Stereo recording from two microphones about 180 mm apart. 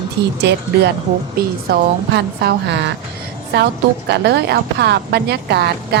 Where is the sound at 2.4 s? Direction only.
75° right (ahead or behind).